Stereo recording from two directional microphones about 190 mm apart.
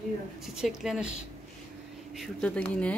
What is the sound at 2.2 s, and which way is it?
Speech, 5° left (ahead or behind).